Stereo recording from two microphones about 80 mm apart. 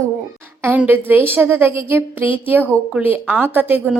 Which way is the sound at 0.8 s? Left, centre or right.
Right.